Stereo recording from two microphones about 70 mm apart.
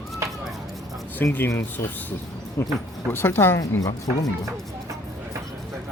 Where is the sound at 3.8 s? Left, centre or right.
Left.